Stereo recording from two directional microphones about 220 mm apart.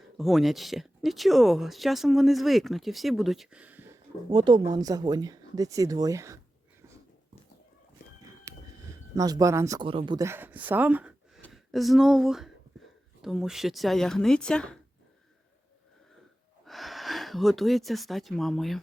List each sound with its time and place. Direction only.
0.2 s speech: centre (ahead or behind)
4.3 s speech: 20° right (ahead or behind)
8.4 s speech: 15° right (ahead or behind); by 14.8 s 5° left (ahead or behind)
16.6 s speech: centre (ahead or behind)